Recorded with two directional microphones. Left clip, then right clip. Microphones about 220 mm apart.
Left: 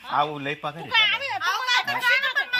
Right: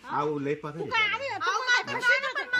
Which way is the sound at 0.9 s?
15° right (ahead or behind).